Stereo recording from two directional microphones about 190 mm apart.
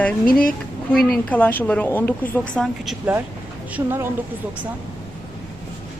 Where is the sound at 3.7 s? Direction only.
10° right (ahead or behind).